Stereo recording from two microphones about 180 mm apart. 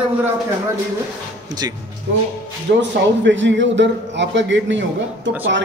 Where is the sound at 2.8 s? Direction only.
85° right.